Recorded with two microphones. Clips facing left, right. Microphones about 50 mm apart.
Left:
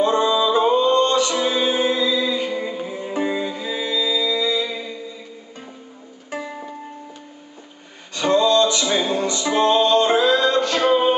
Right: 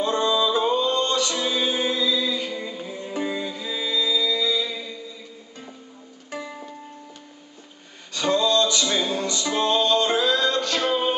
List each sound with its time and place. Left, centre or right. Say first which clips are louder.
0.0 s music: left 4 dB; centre
6.3 s music: left 4 dB; centre
8.1 s music: left 4 dB; centre